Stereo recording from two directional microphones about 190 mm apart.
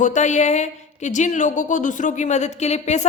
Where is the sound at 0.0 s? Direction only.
40° left (ahead or behind).